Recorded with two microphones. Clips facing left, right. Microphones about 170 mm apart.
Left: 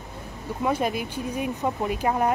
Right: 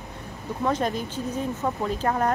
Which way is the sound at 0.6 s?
10° left (ahead or behind).